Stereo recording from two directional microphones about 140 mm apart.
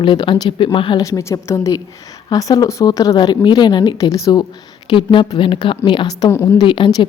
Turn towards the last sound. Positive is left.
turn(degrees=35)  # may be behind; listen again after turning